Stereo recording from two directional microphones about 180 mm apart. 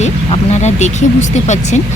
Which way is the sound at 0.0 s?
40° left (ahead or behind).